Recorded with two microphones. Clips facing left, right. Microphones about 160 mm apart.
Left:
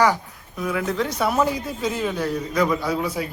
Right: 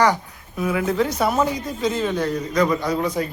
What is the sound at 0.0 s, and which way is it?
Speech, centre (ahead or behind).